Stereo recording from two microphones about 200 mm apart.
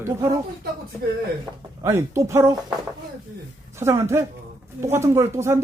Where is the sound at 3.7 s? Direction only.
15° right (ahead or behind).